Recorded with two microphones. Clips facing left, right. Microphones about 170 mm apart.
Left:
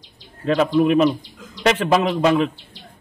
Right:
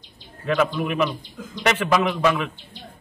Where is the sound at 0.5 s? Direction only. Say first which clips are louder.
Left 6 dB; 35° left (ahead or behind).